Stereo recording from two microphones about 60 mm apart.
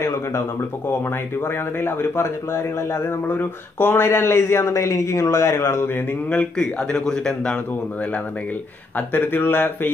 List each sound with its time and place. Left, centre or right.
0.0 s a sound: left
1.4 s speech: left
3.3 s speech: left
4.8 s speech: left
6.3 s a man's voice: centre
8.9 s speech: left